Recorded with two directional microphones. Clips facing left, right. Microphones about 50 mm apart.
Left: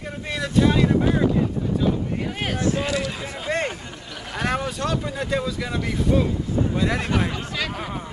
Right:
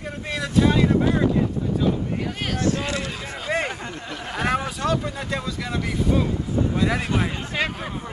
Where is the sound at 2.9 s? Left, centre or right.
Right.